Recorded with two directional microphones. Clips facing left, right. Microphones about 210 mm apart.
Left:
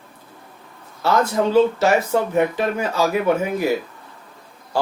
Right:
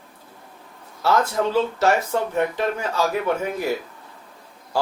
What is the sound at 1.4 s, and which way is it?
Speech, 5° left (ahead or behind).